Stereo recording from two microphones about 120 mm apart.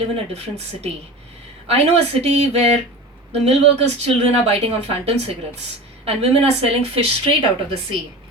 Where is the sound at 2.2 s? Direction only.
60° right (ahead or behind).